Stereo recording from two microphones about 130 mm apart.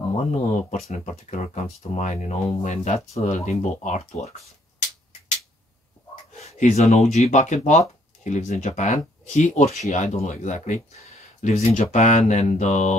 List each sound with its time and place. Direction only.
0.3 s speech: 65° left (ahead or behind)
6.4 s speech: 60° left (ahead or behind)
11.4 s speech: 55° left (ahead or behind)